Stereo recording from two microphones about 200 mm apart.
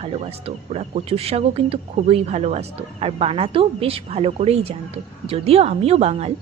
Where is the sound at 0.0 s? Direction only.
30° right (ahead or behind).